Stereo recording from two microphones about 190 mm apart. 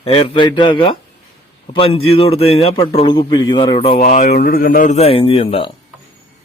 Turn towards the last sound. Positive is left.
turn(degrees=30)  # may be behind; listen again after turning